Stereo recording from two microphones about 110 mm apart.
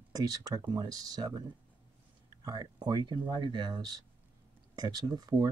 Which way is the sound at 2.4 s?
40° right (ahead or behind).